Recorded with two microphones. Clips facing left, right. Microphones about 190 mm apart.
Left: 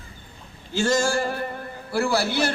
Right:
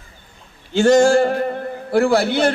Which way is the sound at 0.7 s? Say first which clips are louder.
Right 10 dB; 60° right (ahead or behind).